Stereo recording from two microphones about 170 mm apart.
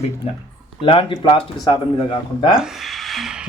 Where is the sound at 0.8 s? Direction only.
30° left (ahead or behind).